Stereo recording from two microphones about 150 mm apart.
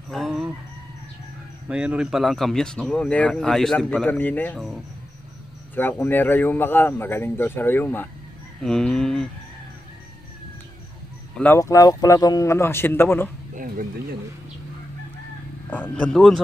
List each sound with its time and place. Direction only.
0.1 s chicken: centre (ahead or behind)
1.7 s speech: 5° right (ahead or behind); by 4.6 s 10° left (ahead or behind)
5.8 s speech: 15° left (ahead or behind)
11.5 s speech: 20° left (ahead or behind)
15.7 s speech: 10° left (ahead or behind)